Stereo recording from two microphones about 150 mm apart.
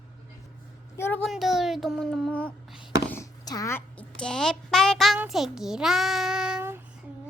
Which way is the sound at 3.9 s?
5° left (ahead or behind).